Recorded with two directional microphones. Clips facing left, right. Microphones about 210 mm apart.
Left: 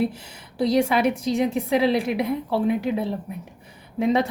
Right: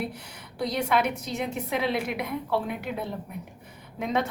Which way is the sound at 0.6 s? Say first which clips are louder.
Left 6 dB; 30° left (ahead or behind).